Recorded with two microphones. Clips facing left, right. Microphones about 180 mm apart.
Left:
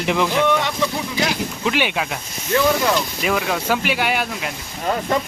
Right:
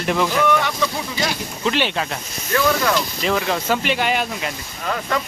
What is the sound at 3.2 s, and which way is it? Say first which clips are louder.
Speech: even; 5° left (ahead or behind).